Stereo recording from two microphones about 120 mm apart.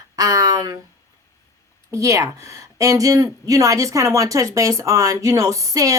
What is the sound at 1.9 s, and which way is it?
A woman's voice, 25° right (ahead or behind).